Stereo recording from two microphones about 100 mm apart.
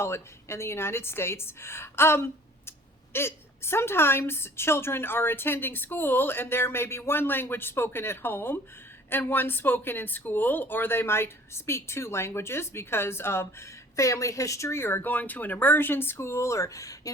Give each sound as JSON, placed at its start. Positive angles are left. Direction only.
{"t": 0.0, "sound": "a woman's voice", "side_deg": 25}